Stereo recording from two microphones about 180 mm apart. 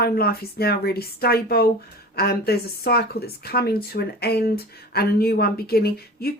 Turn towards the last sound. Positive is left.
turn(degrees=60)  # may be behind; listen again after turning